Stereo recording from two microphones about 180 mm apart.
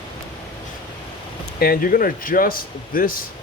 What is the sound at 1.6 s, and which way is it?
Speech, 55° left (ahead or behind).